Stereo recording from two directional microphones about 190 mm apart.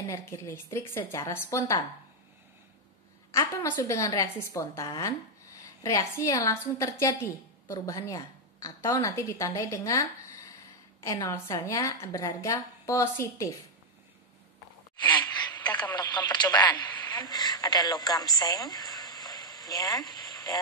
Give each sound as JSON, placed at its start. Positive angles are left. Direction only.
{"t": 0.0, "sound": "a woman's voice", "side_deg": 15}
{"t": 3.3, "sound": "a woman's voice", "side_deg": 15}
{"t": 15.7, "sound": "radio", "side_deg": 20}